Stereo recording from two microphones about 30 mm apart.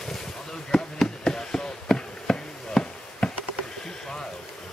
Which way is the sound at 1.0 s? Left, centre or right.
Centre.